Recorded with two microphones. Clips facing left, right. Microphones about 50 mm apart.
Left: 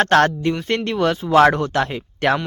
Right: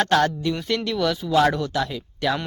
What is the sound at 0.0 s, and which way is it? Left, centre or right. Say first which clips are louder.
Speech: left 5 dB; left.